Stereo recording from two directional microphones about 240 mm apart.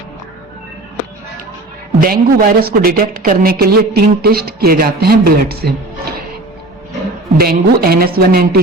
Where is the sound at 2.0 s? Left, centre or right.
Right.